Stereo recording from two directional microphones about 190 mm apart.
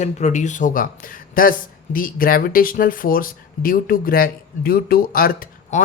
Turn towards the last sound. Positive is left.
turn(degrees=45)  # may be behind; listen again after turning